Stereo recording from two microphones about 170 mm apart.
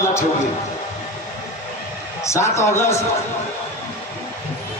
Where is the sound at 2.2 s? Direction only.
15° left (ahead or behind).